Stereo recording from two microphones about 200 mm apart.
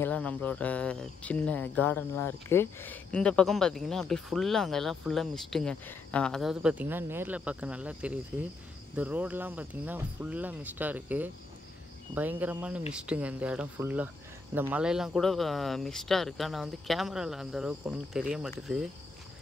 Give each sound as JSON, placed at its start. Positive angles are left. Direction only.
{"t": 0.0, "sound": "speech", "side_deg": 5}